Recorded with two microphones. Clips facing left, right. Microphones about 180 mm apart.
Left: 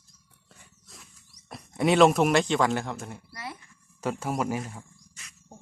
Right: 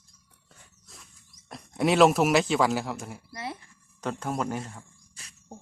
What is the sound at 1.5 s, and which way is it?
Speech, centre (ahead or behind).